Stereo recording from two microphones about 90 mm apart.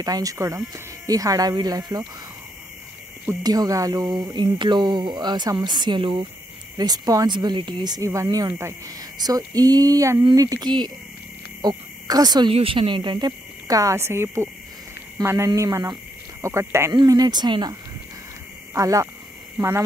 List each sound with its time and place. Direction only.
0.0 s speech: 45° right (ahead or behind)
1.0 s speech: 40° right (ahead or behind)
3.4 s speech: 45° right (ahead or behind); by 6.2 s 70° right (ahead or behind)
6.8 s speech: 45° right (ahead or behind)
8.0 s speech: 35° right (ahead or behind)
9.2 s speech: 45° right (ahead or behind)
11.6 s cricket: 50° right (ahead or behind)
12.4 s speech: 85° right; by 13.3 s 60° right (ahead or behind)
13.7 s speech: 40° right (ahead or behind)
16.9 s speech: 50° right (ahead or behind)
18.7 s speech: 35° right (ahead or behind)